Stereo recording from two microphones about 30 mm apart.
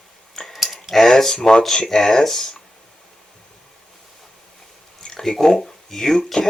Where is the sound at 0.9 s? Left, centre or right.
Centre.